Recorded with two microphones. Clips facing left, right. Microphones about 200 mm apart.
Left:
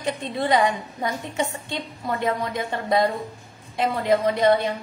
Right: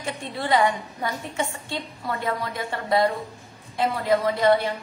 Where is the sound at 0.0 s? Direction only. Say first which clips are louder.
Left 4 dB; 20° left (ahead or behind).